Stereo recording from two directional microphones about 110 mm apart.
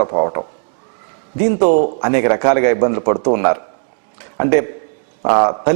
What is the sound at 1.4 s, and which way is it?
A man's voice, 15° right (ahead or behind).